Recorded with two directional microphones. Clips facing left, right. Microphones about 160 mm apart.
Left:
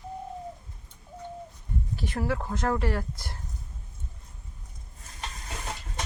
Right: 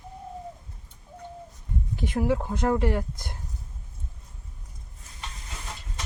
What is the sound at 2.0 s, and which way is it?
Speech, 15° right (ahead or behind).